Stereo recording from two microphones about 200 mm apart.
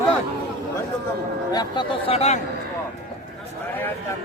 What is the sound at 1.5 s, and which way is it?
Speech, 25° left (ahead or behind).